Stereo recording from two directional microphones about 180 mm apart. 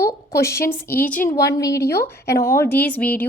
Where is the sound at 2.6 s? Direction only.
10° left (ahead or behind).